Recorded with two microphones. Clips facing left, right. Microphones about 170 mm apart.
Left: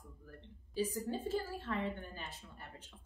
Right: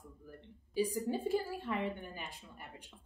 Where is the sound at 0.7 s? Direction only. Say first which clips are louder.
Right 3 dB; 15° right (ahead or behind).